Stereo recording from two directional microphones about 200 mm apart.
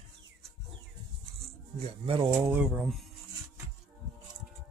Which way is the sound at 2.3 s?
10° right (ahead or behind).